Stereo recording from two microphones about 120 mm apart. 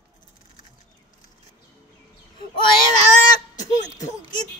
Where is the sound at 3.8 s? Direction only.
30° left (ahead or behind).